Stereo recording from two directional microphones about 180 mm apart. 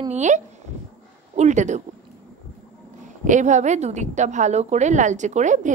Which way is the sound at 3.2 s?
45° right (ahead or behind).